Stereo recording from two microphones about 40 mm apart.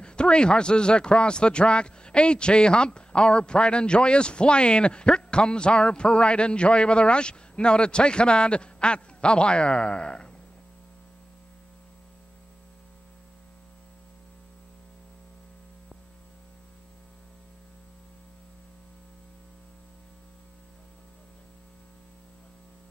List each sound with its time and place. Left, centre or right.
0.0 s speech: left